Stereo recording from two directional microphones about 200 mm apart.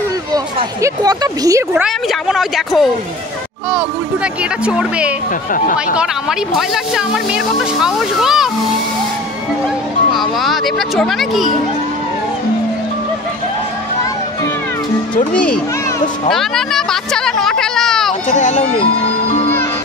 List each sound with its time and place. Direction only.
0.3 s speech: 20° right (ahead or behind)
1.7 s speech: centre (ahead or behind)
5.5 s speech: 45° left (ahead or behind)
5.9 s speech: centre (ahead or behind)
10.1 s speech: centre (ahead or behind)
15.3 s speech: 5° left (ahead or behind)
16.3 s a sound: centre (ahead or behind)
18.3 s speech: 35° left (ahead or behind)